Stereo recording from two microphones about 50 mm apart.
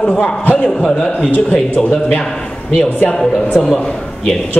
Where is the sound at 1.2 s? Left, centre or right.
Left.